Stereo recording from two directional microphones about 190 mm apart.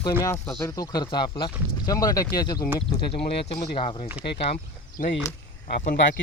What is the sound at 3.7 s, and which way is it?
Speech, 30° left (ahead or behind).